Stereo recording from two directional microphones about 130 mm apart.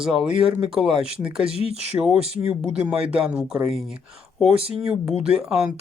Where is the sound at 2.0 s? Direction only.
20° right (ahead or behind).